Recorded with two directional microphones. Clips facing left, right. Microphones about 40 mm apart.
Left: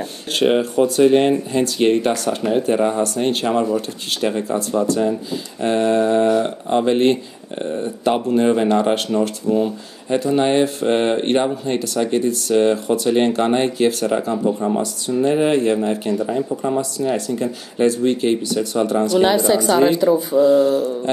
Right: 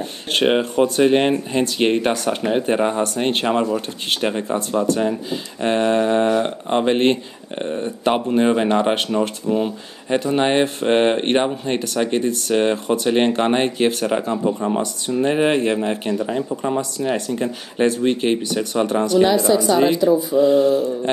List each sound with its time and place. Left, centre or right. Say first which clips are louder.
0.3 s speech: left 1 dB; right
19.2 s a woman's voice: even; left
20.3 s speech: left 2 dB; right